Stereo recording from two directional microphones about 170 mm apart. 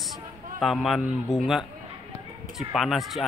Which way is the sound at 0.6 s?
Centre (ahead or behind).